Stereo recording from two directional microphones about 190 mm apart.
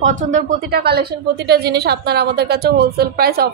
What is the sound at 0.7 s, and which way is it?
A woman's voice, 55° right (ahead or behind).